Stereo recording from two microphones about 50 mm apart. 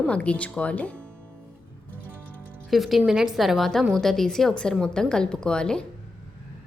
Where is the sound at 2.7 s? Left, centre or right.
Centre.